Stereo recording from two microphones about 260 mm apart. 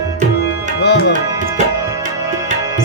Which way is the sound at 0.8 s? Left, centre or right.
Left.